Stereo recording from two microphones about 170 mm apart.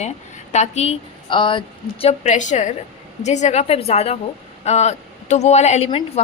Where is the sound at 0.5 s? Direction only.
40° left (ahead or behind).